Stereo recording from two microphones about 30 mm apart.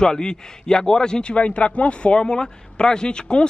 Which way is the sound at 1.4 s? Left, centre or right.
Left.